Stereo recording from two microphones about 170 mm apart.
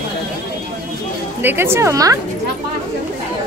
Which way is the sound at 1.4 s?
15° right (ahead or behind).